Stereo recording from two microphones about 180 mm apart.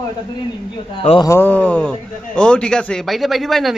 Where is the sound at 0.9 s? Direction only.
30° left (ahead or behind).